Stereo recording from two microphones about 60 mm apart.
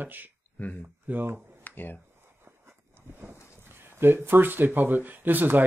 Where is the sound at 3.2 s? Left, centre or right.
Right.